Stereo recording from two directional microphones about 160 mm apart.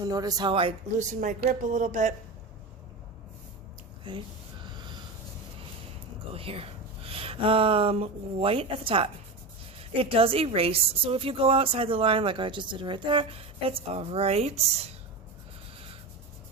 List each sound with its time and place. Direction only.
0.0 s speech: 25° right (ahead or behind)
0.9 s speech: 50° right (ahead or behind)
4.1 s a woman's voice: 30° right (ahead or behind)
4.8 s a sound: 30° right (ahead or behind)
6.3 s a woman's voice: 35° right (ahead or behind)